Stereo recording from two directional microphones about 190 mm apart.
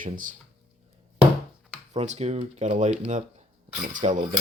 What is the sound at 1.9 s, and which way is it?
Speech, 35° right (ahead or behind).